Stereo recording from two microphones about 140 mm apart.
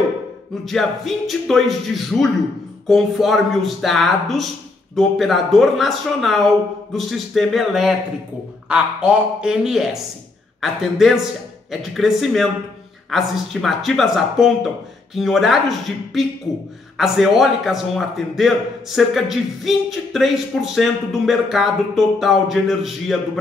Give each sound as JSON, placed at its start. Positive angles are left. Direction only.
{"t": 0.7, "sound": "a man's voice", "side_deg": 0}
{"t": 16.9, "sound": "a man's voice", "side_deg": 0}